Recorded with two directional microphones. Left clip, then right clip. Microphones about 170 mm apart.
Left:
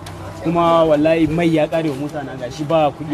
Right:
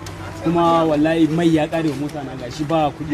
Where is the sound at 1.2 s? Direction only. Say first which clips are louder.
Even; 40° left (ahead or behind).